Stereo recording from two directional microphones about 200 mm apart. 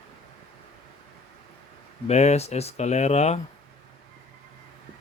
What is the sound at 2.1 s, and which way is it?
Speech, 35° left (ahead or behind).